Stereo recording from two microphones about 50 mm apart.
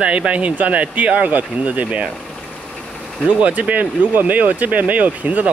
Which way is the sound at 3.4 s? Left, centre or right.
Right.